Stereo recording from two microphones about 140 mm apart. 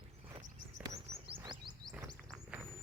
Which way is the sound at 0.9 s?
25° right (ahead or behind).